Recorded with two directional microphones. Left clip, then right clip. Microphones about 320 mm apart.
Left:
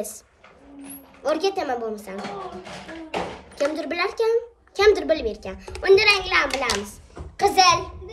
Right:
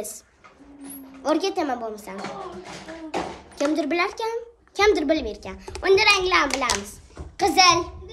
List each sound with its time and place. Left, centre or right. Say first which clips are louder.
1.2 s speech: even; centre
3.5 s speech: right 1 dB; centre
6.9 s a sound: left 1 dB; centre